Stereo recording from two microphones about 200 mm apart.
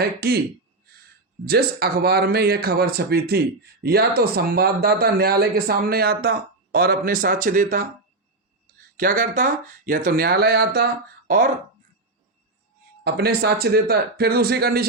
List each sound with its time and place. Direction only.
0.0 s speech: 50° right (ahead or behind)
1.5 s speech: 50° right (ahead or behind)
9.0 s speech: 45° right (ahead or behind)
13.1 s speech: 50° right (ahead or behind)